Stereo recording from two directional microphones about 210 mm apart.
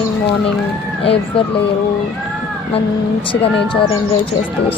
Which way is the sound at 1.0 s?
25° left (ahead or behind).